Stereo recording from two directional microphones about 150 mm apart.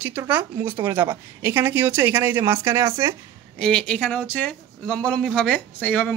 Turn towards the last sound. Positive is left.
turn(degrees=10)  # may be behind; listen again after turning